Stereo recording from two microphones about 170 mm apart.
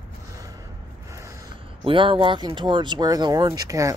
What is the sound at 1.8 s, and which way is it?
Speech, 30° right (ahead or behind).